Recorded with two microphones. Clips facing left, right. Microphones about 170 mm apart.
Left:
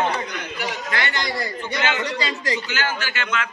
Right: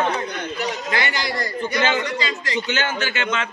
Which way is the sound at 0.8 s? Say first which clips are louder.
Right 2 dB; 10° right (ahead or behind).